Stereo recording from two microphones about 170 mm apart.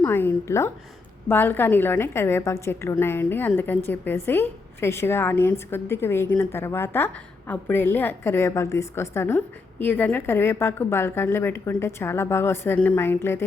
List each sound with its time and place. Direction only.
0.0 s a woman's voice: 15° left (ahead or behind)